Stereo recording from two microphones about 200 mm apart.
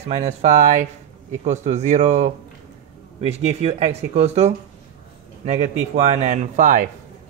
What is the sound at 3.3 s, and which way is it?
Speech, 30° right (ahead or behind).